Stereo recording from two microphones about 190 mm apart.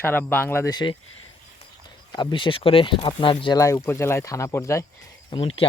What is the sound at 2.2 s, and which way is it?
Speech, 25° left (ahead or behind).